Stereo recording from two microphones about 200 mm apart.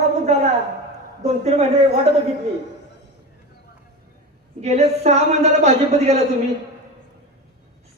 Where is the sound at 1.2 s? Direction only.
35° right (ahead or behind).